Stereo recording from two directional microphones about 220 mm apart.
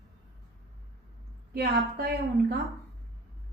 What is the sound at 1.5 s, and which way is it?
Speech, 45° right (ahead or behind).